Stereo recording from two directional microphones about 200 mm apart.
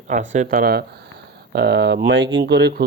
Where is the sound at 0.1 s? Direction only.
40° right (ahead or behind).